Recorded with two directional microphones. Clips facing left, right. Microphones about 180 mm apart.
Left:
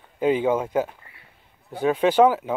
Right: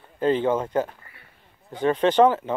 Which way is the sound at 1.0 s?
25° left (ahead or behind).